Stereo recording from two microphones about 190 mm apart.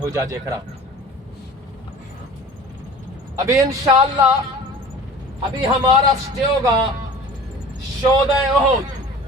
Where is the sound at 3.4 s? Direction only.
15° right (ahead or behind).